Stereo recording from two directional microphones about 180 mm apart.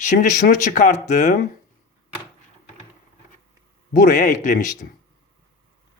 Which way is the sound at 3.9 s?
45° left (ahead or behind).